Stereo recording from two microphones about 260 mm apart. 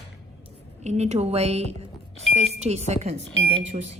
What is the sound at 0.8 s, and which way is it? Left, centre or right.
Speech, right.